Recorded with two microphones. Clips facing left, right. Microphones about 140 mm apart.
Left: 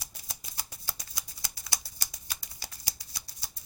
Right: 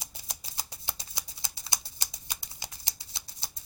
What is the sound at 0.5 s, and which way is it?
Shuffling cards, 20° right (ahead or behind).